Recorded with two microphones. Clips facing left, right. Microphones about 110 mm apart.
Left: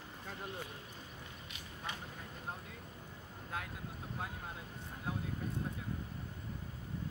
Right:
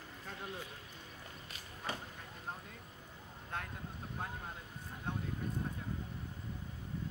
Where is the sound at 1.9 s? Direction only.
40° right (ahead or behind).